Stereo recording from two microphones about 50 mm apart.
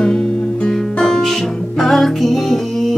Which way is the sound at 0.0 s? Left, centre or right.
Centre.